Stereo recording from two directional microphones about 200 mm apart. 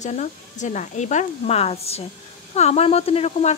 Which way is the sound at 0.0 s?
35° left (ahead or behind).